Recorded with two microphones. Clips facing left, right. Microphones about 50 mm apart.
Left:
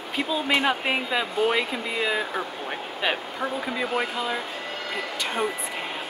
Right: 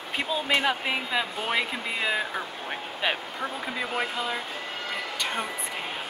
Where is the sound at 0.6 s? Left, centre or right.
Centre.